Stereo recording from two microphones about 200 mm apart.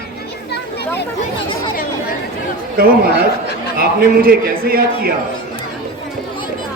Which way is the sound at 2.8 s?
45° right (ahead or behind).